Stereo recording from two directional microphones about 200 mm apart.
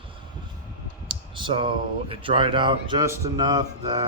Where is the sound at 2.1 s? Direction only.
25° right (ahead or behind).